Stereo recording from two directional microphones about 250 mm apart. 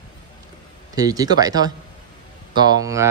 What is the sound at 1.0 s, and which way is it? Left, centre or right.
Speech, centre.